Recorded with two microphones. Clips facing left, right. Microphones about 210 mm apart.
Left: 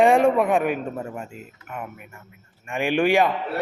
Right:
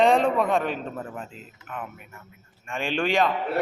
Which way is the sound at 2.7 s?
15° left (ahead or behind).